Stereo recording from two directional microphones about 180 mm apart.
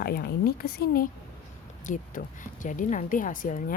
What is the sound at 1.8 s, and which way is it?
A woman's voice, 45° left (ahead or behind).